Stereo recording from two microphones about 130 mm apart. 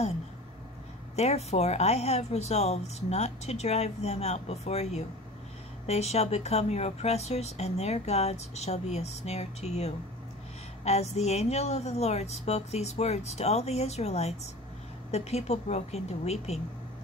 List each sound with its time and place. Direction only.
1.1 s speech: 55° left (ahead or behind)